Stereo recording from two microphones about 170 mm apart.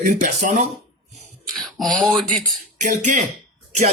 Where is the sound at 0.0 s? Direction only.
50° right (ahead or behind).